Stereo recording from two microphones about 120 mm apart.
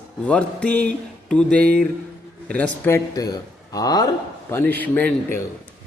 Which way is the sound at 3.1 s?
30° left (ahead or behind).